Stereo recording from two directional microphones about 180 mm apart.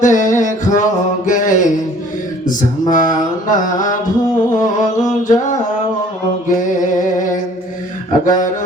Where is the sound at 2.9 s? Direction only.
45° left (ahead or behind).